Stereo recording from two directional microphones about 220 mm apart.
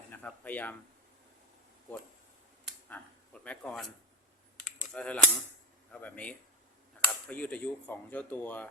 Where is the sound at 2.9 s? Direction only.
10° left (ahead or behind).